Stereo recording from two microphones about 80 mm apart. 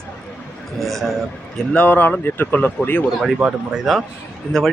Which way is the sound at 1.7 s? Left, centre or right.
Centre.